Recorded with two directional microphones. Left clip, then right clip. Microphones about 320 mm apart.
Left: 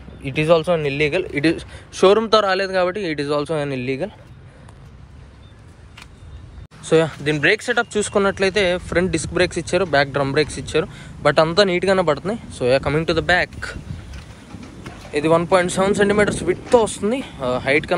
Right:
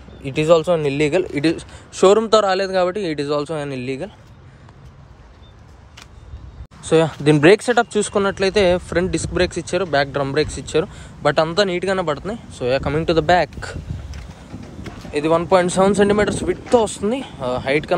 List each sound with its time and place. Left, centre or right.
0.2 s speech: centre
6.8 s speech: centre
15.1 s speech: centre